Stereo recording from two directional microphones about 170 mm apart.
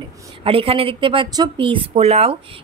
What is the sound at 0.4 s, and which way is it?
A woman's voice, 35° right (ahead or behind).